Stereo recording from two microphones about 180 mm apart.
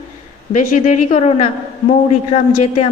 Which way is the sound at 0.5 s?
40° left (ahead or behind).